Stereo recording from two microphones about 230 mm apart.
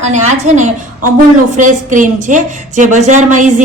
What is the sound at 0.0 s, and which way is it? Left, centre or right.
A woman's voice, right.